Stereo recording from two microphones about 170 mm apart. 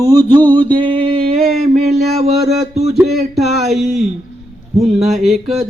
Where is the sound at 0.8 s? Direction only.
30° right (ahead or behind).